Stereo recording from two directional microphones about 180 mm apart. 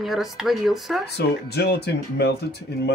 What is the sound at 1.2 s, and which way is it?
Speech, 65° left (ahead or behind).